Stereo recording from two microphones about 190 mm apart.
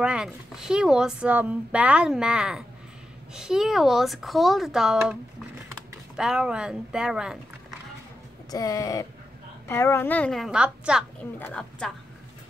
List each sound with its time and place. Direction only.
0.0 s speech: 5° right (ahead or behind)
6.1 s speech: 5° right (ahead or behind)
8.5 s a woman's voice: 20° left (ahead or behind); by 11.1 s 5° right (ahead or behind)
11.3 s a woman's voice: 10° left (ahead or behind)